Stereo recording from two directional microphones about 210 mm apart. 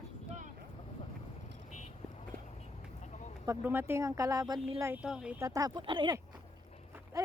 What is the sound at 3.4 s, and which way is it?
Speech, 10° right (ahead or behind).